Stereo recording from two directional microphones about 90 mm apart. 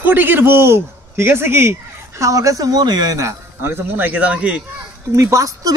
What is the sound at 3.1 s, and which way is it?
Speech, 30° right (ahead or behind).